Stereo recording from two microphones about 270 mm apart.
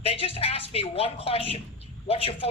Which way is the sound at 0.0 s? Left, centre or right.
Left.